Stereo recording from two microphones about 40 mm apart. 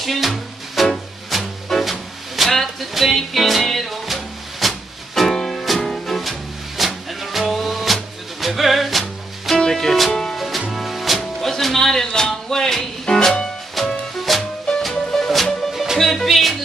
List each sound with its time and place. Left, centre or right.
0.0 s music: centre
2.3 s speech: centre
3.2 s music: centre
9.6 s music: centre
13.8 s music: centre
15.7 s music: centre